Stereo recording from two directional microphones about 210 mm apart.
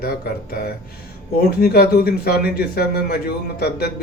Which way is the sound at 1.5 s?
45° left (ahead or behind).